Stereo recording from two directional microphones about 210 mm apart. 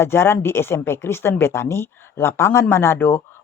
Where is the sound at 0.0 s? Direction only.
10° left (ahead or behind).